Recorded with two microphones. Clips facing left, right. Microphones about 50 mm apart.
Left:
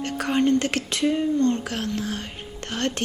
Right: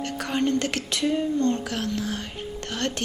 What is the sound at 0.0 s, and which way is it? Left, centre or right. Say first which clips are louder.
Speech: left 3 dB; left.